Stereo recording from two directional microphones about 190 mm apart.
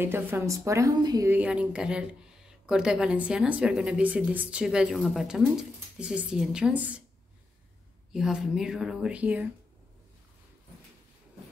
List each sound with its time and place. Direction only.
0.0 s a woman's voice: 10° right (ahead or behind)
1.3 s a woman's voice: 5° right (ahead or behind)
8.1 s a woman's voice: 5° right (ahead or behind)